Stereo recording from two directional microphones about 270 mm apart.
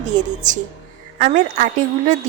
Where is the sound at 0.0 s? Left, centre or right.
Right.